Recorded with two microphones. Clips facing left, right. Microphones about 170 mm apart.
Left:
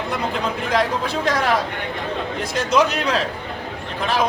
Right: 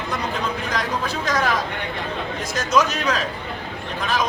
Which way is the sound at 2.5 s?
30° left (ahead or behind).